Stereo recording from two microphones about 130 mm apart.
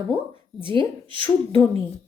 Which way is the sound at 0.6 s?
40° right (ahead or behind).